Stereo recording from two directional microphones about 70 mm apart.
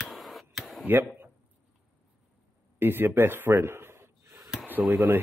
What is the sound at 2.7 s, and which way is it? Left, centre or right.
A man's voice, right.